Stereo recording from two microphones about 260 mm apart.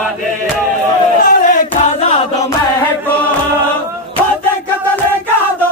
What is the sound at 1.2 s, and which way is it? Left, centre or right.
Battle cry, left.